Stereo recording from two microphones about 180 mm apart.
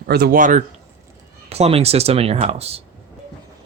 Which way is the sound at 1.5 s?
35° right (ahead or behind).